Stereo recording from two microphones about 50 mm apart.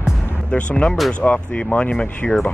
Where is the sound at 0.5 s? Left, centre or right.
Centre.